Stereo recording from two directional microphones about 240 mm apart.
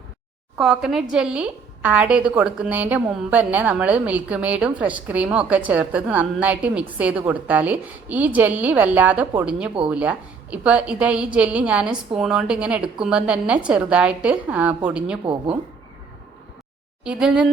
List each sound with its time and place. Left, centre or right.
0.5 s a woman's voice: centre
15.2 s speech: right
17.0 s a woman's voice: centre